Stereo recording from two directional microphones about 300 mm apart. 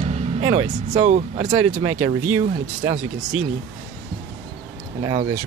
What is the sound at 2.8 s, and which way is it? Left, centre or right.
Speech, centre.